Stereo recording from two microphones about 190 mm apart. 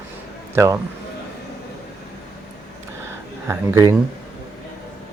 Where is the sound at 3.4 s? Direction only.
15° right (ahead or behind).